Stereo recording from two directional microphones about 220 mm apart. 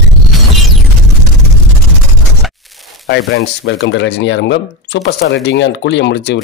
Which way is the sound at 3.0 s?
50° left (ahead or behind).